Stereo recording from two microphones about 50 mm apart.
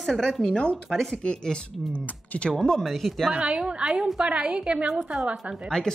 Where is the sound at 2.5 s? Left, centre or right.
Centre.